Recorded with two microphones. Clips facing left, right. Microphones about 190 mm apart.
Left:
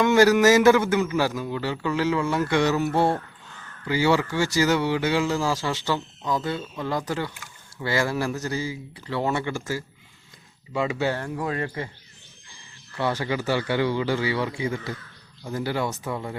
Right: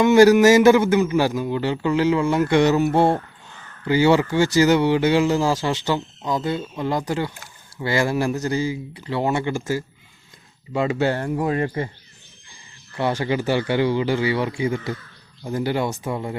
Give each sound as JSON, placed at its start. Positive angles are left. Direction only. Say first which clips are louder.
{"t": 0.0, "sound": "a man's voice", "louder": "right 5 dB", "side_deg": -15}
{"t": 1.0, "sound": "a man's voice", "louder": "right 4 dB", "side_deg": -25}
{"t": 11.1, "sound": "speech", "louder": "right 5 dB", "side_deg": -35}
{"t": 11.4, "sound": "a man's voice", "louder": "right 6 dB", "side_deg": -15}
{"t": 13.0, "sound": "a man's voice", "louder": "right 4 dB", "side_deg": -15}